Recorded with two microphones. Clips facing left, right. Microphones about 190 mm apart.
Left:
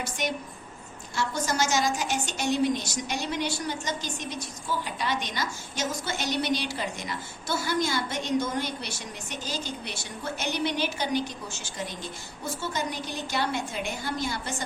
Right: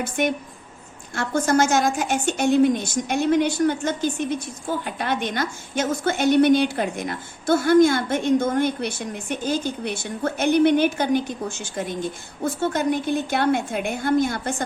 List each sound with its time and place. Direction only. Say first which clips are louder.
0.0 s a woman's voice: right 8 dB; 55° right (ahead or behind)